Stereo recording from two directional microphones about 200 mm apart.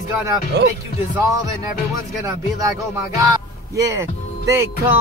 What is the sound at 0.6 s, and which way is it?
Speech, 55° right (ahead or behind).